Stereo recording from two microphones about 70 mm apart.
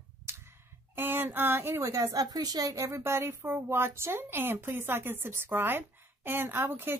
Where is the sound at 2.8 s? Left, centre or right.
Right.